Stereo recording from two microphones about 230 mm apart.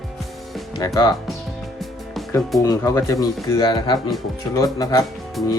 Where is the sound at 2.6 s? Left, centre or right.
Centre.